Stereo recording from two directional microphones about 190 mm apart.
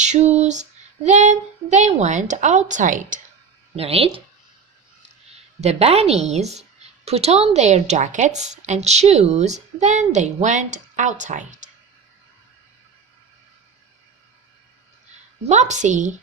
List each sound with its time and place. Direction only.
0.0 s child singing: 35° right (ahead or behind)
3.8 s a woman's voice: 30° right (ahead or behind)
5.5 s a woman's voice: 35° right (ahead or behind)
15.4 s a woman's voice: 40° right (ahead or behind)